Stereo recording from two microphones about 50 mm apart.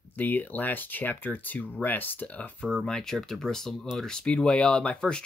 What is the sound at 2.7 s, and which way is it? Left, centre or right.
Speech, centre.